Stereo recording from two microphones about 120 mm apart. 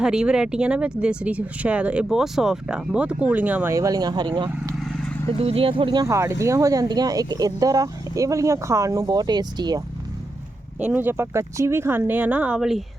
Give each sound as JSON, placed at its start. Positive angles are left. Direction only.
{"t": 0.0, "sound": "speech", "side_deg": -5}
{"t": 3.7, "sound": "speech", "side_deg": -30}
{"t": 4.8, "sound": "vehicle", "side_deg": 5}
{"t": 5.4, "sound": "speech", "side_deg": -50}
{"t": 6.1, "sound": "speech", "side_deg": -25}
{"t": 10.8, "sound": "speech", "side_deg": -15}